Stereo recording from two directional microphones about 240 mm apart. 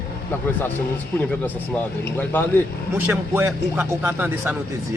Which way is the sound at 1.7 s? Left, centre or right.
Centre.